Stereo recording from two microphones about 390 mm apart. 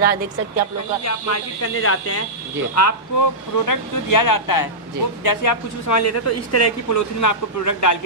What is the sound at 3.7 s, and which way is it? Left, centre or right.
Speech, left.